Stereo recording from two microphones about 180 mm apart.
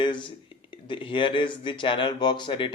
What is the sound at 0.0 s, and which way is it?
A man's voice, 25° left (ahead or behind).